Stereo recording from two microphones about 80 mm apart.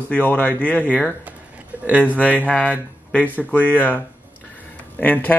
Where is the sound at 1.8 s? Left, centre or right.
Centre.